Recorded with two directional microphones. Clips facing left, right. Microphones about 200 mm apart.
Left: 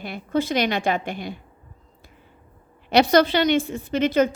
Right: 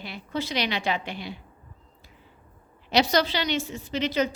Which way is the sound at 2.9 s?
55° left (ahead or behind).